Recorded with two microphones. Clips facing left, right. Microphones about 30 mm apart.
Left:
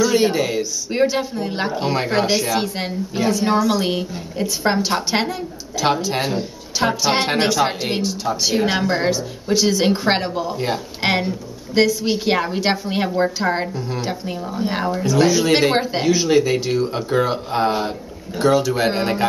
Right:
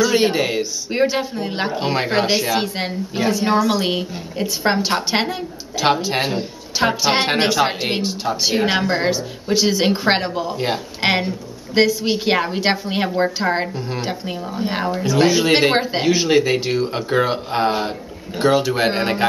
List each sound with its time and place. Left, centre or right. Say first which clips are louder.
0.1 s speech: even; right